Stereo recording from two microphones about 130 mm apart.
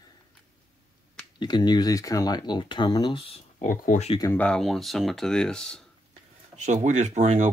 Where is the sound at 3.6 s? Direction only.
90° left.